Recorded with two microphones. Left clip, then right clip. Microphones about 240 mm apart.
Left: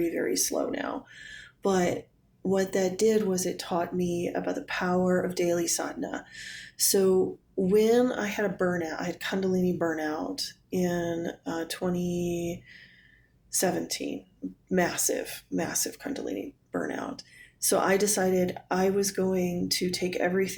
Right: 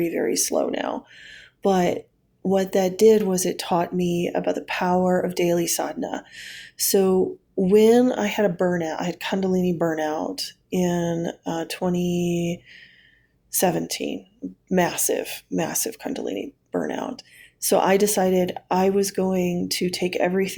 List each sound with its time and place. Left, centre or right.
0.0 s speech: right